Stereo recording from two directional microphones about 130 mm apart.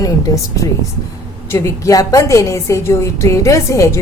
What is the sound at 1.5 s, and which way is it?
A woman's voice, 25° left (ahead or behind).